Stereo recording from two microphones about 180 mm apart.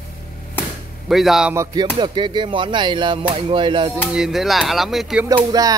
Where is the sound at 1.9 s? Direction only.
25° right (ahead or behind).